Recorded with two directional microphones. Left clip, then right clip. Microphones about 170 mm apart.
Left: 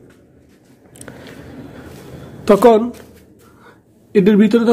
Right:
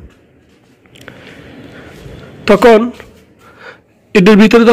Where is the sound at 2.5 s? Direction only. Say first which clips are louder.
Right 4 dB; 15° right (ahead or behind).